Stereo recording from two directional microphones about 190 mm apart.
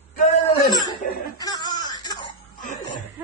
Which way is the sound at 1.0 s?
50° left (ahead or behind).